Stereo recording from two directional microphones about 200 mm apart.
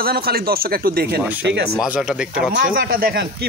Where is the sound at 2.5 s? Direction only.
45° right (ahead or behind).